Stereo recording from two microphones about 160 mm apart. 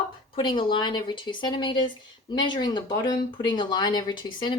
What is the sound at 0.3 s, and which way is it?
Speech, 30° left (ahead or behind).